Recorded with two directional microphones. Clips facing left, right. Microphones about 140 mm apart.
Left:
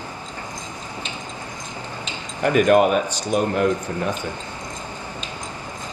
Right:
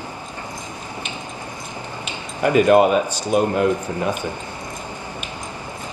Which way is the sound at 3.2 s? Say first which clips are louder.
Right 2 dB; 10° right (ahead or behind).